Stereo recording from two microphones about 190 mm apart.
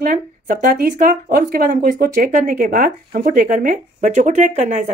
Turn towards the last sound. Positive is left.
turn(degrees=-35)  # may be behind; listen again after turning